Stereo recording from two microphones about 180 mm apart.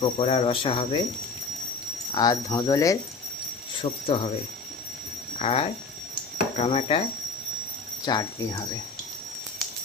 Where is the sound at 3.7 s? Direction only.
30° left (ahead or behind).